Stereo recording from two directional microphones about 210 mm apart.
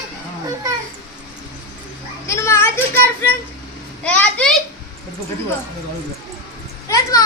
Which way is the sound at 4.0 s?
5° left (ahead or behind).